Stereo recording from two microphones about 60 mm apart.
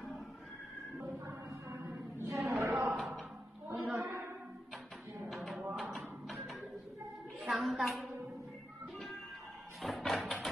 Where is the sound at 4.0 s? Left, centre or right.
Right.